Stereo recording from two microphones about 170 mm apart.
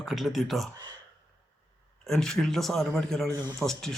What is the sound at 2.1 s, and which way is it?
Speech, centre (ahead or behind).